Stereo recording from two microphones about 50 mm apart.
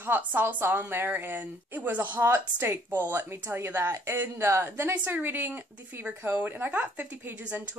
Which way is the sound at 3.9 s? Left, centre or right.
Right.